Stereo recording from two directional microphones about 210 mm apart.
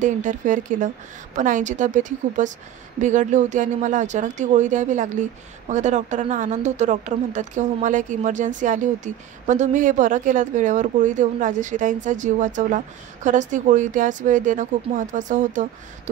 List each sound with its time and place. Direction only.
0.0 s speech: 35° right (ahead or behind)